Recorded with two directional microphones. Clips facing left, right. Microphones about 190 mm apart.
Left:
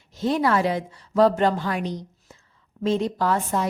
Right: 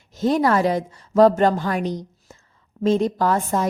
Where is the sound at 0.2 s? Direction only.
45° right (ahead or behind).